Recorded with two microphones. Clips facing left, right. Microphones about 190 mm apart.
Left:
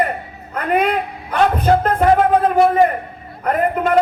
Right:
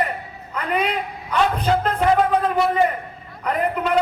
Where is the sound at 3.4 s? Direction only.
50° left (ahead or behind).